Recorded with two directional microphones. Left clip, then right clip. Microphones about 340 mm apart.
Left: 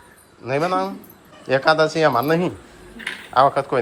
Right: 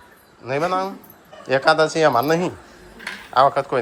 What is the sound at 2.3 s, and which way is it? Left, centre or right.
A man's voice, centre.